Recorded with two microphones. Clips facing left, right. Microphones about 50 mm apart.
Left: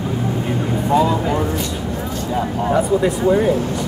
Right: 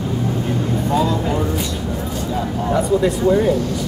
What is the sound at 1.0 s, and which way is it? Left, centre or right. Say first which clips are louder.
Speech: left 3 dB; left.